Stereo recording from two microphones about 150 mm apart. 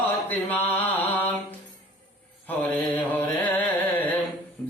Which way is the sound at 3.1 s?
10° left (ahead or behind).